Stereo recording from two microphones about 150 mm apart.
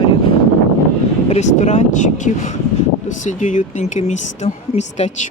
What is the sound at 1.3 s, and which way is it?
Speech, 50° left (ahead or behind).